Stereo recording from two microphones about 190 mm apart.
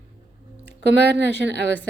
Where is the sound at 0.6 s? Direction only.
60° right (ahead or behind).